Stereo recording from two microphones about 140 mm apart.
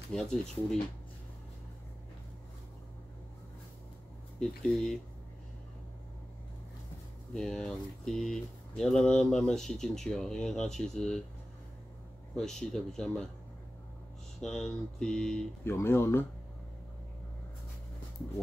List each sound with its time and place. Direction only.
0.1 s speech: 5° left (ahead or behind)
4.4 s speech: 5° left (ahead or behind)
7.3 s speech: 5° left (ahead or behind)
12.4 s speech: 5° left (ahead or behind)
14.4 s speech: 5° left (ahead or behind)
15.6 s speech: 15° left (ahead or behind)